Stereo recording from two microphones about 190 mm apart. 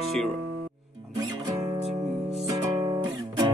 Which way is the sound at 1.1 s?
20° right (ahead or behind).